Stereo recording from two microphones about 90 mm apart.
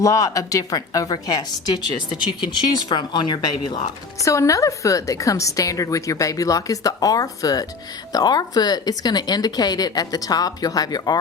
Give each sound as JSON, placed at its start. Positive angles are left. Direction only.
{"t": 0.0, "sound": "a woman's voice", "side_deg": 40}
{"t": 2.7, "sound": "speech", "side_deg": 55}
{"t": 4.2, "sound": "a woman's voice", "side_deg": 35}